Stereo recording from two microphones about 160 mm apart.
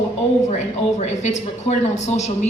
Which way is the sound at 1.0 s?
45° left (ahead or behind).